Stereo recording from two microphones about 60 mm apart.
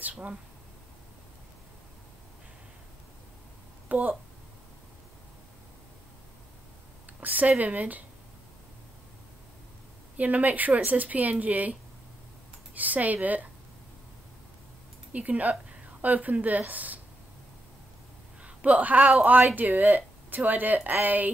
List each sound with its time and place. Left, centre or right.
0.0 s speech: right
3.9 s speech: right
7.2 s speech: right
10.1 s speech: right
12.7 s speech: right
15.1 s speech: right
18.4 s a sound: right
19.5 s speech: right